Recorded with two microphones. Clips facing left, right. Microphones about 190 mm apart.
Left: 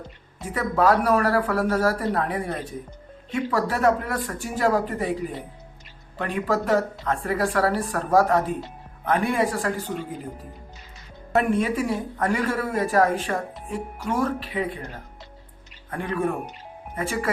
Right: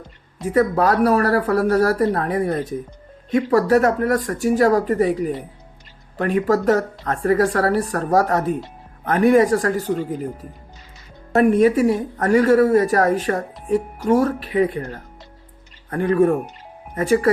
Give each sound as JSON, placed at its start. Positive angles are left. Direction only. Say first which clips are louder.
{"t": 0.4, "sound": "a woman's voice", "louder": "right 4 dB", "side_deg": -40}
{"t": 6.1, "sound": "speech", "louder": "right 6 dB", "side_deg": -45}
{"t": 11.3, "sound": "a woman's voice", "louder": "right 7 dB", "side_deg": -40}
{"t": 15.9, "sound": "speech", "louder": "right 9 dB", "side_deg": -45}